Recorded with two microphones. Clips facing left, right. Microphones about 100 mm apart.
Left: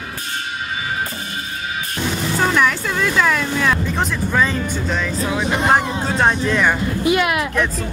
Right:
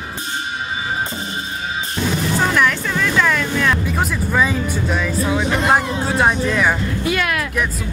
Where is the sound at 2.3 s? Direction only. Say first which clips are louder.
Left 1 dB; centre (ahead or behind).